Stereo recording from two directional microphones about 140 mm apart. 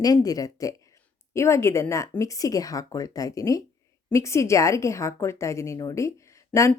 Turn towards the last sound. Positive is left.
turn(degrees=20)  # may be behind; listen again after turning